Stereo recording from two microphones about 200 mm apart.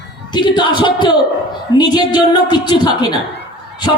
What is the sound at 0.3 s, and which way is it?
Speech, 20° left (ahead or behind).